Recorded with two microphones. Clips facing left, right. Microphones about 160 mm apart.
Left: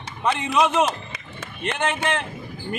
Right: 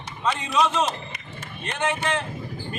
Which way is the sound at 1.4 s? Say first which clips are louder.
Left 2 dB; 65° left (ahead or behind).